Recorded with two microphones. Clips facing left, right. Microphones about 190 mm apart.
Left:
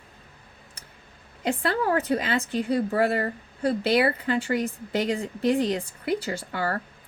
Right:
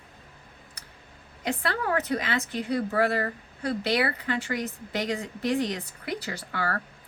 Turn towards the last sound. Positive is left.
turn(degrees=25)  # may be behind; listen again after turning